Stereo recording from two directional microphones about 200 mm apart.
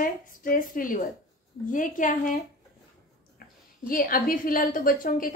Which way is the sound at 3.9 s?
45° left (ahead or behind).